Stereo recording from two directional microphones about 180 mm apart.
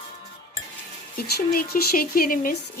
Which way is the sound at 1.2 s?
55° left (ahead or behind).